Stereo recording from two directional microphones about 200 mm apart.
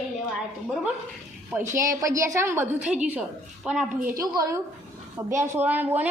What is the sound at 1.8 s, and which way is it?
A woman's voice, 15° right (ahead or behind).